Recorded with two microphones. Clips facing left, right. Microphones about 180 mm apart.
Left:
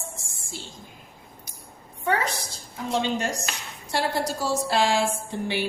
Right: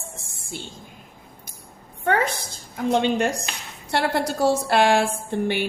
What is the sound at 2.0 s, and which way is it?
A woman's voice, 55° right (ahead or behind).